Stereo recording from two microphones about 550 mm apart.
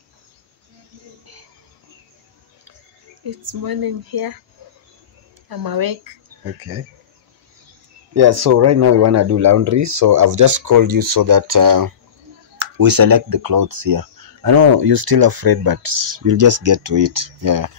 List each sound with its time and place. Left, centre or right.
3.3 s speech: right
5.5 s speech: right
6.4 s speech: right
8.1 s speech: right